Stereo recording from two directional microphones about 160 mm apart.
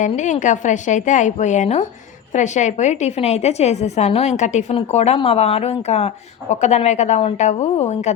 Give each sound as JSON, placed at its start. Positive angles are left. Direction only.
{"t": 0.0, "sound": "speech", "side_deg": 50}